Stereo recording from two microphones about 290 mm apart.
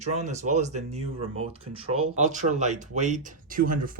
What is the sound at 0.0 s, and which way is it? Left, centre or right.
Speech, right.